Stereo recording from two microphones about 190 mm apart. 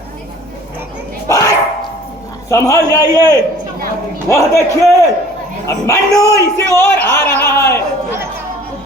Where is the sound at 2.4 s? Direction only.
15° left (ahead or behind).